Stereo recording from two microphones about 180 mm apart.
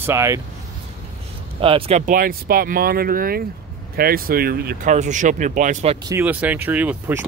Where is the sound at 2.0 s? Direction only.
50° right (ahead or behind).